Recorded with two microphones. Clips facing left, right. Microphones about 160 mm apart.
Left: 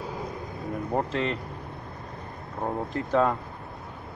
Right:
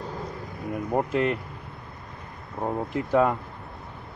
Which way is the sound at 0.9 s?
10° right (ahead or behind).